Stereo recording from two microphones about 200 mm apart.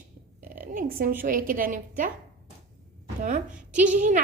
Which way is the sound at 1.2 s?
45° right (ahead or behind).